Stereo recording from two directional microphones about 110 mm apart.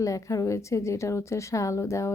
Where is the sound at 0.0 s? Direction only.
30° left (ahead or behind).